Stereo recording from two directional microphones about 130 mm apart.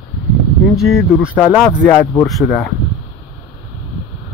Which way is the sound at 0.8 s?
Centre (ahead or behind).